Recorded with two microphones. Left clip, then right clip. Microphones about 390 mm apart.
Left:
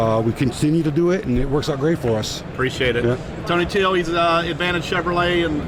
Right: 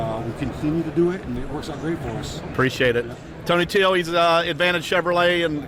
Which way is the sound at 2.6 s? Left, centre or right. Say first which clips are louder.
Even; right.